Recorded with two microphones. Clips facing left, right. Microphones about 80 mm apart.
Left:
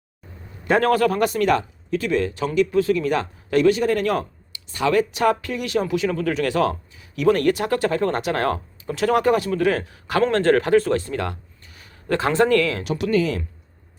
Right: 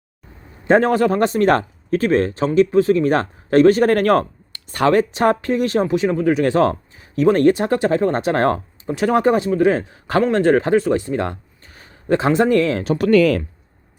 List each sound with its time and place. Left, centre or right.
0.6 s a man's voice: right
4.9 s speech: right
10.2 s speech: centre
11.6 s a sound: right
12.0 s speech: right
13.1 s speech: right